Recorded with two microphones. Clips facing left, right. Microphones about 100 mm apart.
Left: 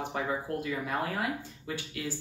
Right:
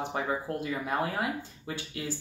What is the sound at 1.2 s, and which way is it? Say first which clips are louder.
Speech: right 1 dB; 25° right (ahead or behind).